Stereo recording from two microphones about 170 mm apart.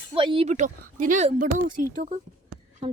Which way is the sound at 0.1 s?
30° right (ahead or behind).